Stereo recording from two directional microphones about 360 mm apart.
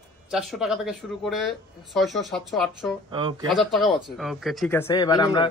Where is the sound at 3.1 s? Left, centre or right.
Centre.